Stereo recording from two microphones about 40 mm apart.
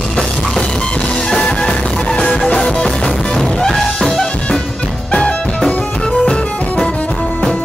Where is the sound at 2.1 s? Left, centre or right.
Centre.